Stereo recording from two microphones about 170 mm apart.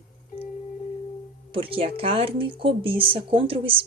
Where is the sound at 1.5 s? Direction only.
30° right (ahead or behind).